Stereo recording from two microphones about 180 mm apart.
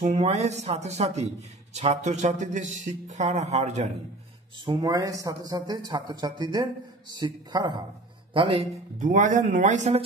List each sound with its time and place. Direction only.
0.0 s speech: 40° right (ahead or behind)
4.6 s a man's voice: 20° right (ahead or behind)
9.0 s speech: 45° right (ahead or behind)